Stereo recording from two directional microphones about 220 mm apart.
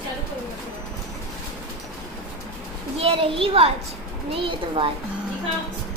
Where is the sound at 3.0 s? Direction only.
25° right (ahead or behind).